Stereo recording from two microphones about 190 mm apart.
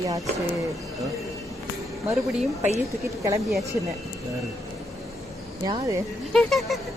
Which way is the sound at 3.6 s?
15° right (ahead or behind).